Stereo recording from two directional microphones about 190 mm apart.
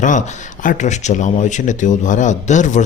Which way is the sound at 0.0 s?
40° left (ahead or behind).